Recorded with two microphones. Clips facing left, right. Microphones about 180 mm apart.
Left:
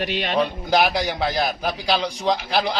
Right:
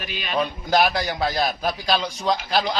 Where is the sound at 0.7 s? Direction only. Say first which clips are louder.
Even; 15° left (ahead or behind).